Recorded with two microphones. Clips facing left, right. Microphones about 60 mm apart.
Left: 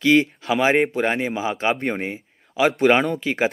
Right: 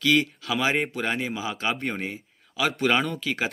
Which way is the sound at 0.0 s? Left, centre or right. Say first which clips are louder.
Left 5 dB; left.